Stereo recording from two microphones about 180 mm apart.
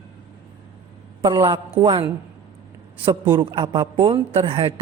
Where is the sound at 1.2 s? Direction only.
30° right (ahead or behind).